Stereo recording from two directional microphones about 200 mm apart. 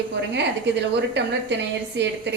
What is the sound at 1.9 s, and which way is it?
Speech, 60° right (ahead or behind).